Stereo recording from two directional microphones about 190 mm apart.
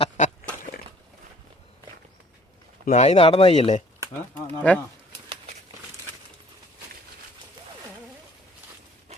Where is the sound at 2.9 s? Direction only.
35° left (ahead or behind).